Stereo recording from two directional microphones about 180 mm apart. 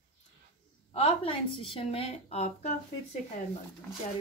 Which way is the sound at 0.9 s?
30° left (ahead or behind).